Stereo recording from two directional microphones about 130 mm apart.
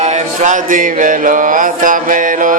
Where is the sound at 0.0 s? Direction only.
65° right (ahead or behind).